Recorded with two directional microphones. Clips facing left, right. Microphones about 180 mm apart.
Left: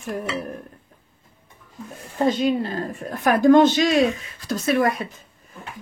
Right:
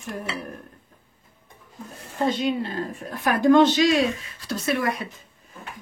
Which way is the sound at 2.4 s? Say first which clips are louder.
Left 3 dB; 45° left (ahead or behind).